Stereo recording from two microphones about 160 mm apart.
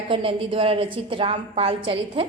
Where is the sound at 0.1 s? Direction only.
35° right (ahead or behind).